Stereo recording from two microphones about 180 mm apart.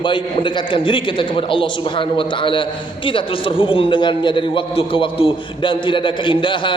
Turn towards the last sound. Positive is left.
turn(degrees=30)  # may be behind; listen again after turning